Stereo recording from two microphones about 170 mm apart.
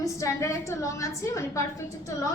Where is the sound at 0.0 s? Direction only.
20° left (ahead or behind).